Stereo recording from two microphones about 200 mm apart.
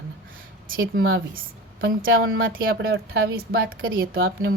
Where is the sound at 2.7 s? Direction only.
65° right (ahead or behind).